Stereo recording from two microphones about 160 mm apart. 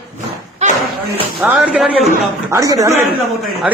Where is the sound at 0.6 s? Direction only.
45° right (ahead or behind).